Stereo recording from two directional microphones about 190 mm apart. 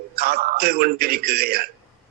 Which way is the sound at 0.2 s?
55° right (ahead or behind).